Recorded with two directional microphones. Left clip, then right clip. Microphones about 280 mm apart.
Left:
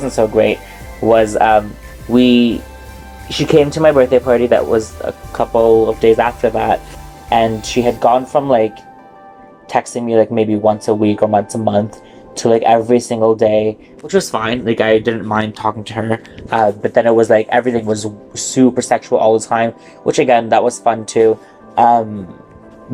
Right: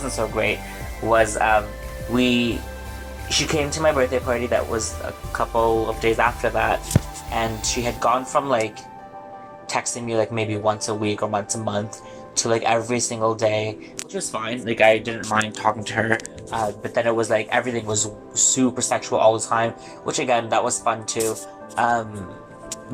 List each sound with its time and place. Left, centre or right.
0.0 s speech: left; by 16.2 s centre
16.5 s speech: left